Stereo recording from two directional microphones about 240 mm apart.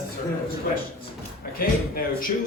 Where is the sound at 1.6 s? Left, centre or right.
Left.